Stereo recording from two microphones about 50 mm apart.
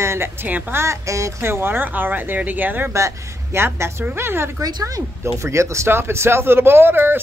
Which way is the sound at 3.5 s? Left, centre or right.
Right.